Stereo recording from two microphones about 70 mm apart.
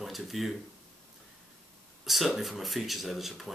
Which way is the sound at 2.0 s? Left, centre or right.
Centre.